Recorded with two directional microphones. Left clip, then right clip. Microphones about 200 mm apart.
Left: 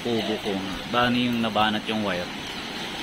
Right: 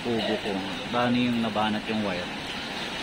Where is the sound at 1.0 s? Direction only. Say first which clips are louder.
Left 3 dB; 15° left (ahead or behind).